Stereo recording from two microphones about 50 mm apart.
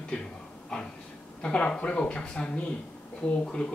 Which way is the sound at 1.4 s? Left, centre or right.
Left.